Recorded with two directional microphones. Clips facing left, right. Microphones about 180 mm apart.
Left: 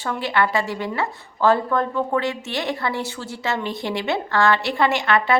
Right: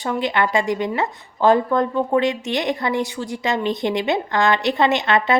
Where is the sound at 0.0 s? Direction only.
20° right (ahead or behind).